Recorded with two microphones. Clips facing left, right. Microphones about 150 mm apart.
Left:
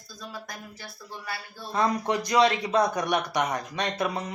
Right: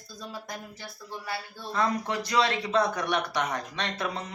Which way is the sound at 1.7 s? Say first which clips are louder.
Left 3 dB; 20° left (ahead or behind).